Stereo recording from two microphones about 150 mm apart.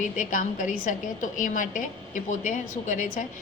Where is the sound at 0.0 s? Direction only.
60° left (ahead or behind).